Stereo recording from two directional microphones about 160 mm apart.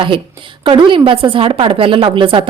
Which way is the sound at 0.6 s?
30° right (ahead or behind).